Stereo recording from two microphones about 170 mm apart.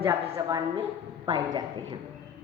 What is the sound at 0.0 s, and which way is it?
A woman's voice, 20° right (ahead or behind).